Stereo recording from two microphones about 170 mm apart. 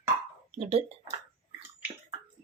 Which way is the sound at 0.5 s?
35° right (ahead or behind).